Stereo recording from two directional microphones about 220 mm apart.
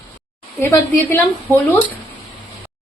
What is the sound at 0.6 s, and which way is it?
Speech, 10° left (ahead or behind).